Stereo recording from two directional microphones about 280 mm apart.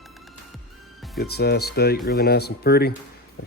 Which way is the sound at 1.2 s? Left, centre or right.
Left.